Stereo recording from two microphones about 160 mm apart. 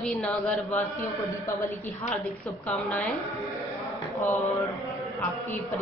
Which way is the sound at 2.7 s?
10° left (ahead or behind).